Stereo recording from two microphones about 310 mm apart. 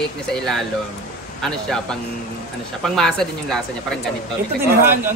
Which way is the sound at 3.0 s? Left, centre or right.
Centre.